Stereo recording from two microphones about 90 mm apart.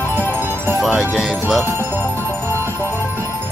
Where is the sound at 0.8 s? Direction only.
Centre (ahead or behind).